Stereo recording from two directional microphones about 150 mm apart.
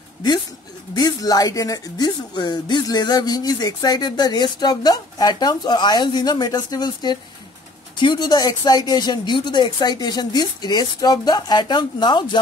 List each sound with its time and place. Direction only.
0.9 s speech: 25° left (ahead or behind)